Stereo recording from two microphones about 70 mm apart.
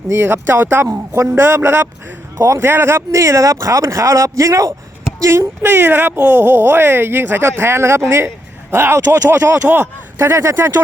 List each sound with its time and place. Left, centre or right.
0.1 s speech: right
5.6 s speech: right